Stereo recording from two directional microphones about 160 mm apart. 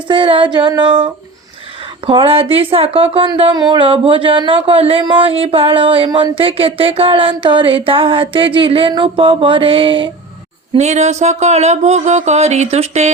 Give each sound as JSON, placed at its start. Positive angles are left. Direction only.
{"t": 0.1, "sound": "female singing", "side_deg": -30}
{"t": 2.0, "sound": "speech", "side_deg": -35}
{"t": 10.8, "sound": "speech", "side_deg": -45}